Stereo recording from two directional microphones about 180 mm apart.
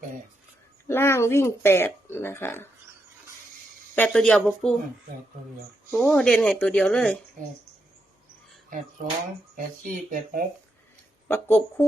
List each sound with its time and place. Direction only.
0.9 s speech: 15° left (ahead or behind)
3.9 s speech: 5° left (ahead or behind)
5.9 s speech: 5° left (ahead or behind)
9.8 s speech: 50° right (ahead or behind)
11.3 s speech: 15° left (ahead or behind)